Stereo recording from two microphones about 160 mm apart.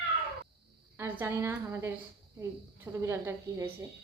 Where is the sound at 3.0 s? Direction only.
20° right (ahead or behind).